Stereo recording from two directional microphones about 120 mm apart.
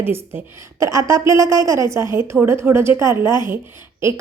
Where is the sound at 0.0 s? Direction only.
20° right (ahead or behind).